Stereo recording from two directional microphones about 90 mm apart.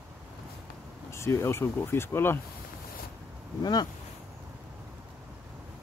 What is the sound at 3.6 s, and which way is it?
Speech, 50° left (ahead or behind).